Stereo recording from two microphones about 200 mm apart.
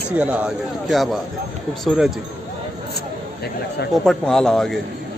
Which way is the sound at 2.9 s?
55° left (ahead or behind).